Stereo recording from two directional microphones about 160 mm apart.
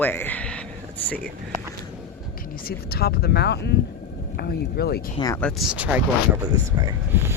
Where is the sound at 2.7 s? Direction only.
75° left (ahead or behind); by 3.7 s 90° left.